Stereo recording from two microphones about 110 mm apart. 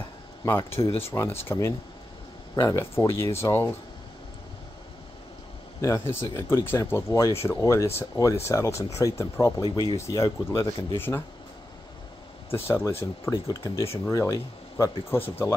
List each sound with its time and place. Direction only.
0.5 s speech: 20° left (ahead or behind)
5.8 s speech: 25° left (ahead or behind)
12.5 s speech: 20° left (ahead or behind)